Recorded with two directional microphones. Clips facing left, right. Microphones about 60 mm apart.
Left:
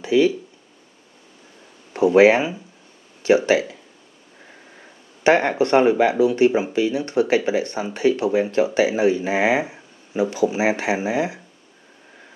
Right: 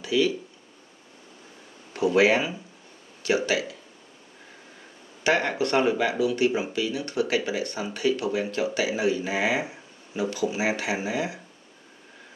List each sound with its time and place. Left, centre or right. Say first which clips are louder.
0.0 s a sound: left 7 dB; left
2.0 s speech: left 7 dB; left
5.2 s speech: left 7 dB; left